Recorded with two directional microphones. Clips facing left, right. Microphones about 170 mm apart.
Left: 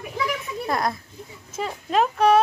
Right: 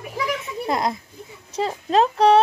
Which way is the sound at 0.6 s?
20° right (ahead or behind).